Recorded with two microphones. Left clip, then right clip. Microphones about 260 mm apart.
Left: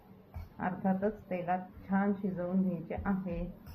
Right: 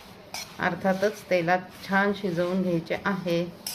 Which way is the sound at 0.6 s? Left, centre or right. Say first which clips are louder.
Right 9 dB; right.